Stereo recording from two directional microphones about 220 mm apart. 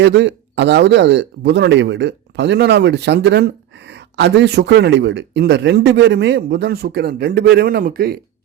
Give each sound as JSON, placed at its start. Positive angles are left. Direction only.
{"t": 0.0, "sound": "speech", "side_deg": -50}